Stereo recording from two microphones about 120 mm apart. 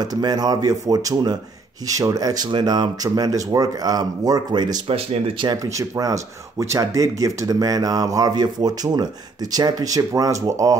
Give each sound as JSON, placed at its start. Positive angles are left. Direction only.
{"t": 0.0, "sound": "speech", "side_deg": -35}